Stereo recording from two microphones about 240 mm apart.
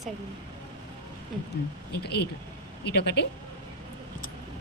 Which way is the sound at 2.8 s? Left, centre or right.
Left.